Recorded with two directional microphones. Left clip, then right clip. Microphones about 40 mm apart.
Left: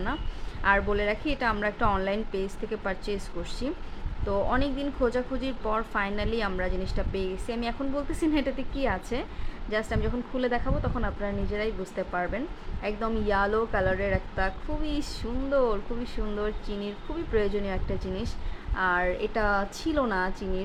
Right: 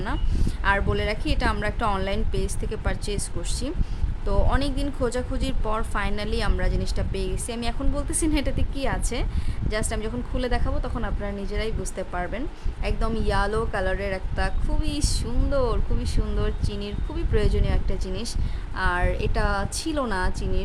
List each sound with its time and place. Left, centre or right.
0.6 s a woman's voice: right
4.3 s a woman's voice: right
5.0 s a woman's voice: right
9.6 s a woman's voice: right
14.1 s a woman's voice: right